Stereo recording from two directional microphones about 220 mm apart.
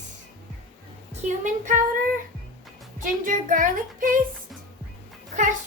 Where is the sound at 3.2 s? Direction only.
35° right (ahead or behind).